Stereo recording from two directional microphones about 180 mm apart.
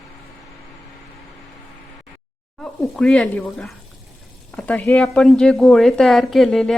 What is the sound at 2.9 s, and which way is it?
A woman's voice, 5° left (ahead or behind).